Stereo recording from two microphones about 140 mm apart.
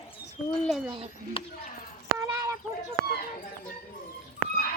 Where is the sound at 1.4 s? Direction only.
40° left (ahead or behind).